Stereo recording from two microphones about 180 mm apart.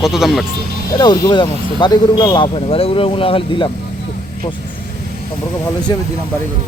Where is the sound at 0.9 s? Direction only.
25° left (ahead or behind).